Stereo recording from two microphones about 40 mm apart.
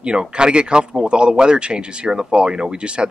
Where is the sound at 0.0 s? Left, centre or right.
Right.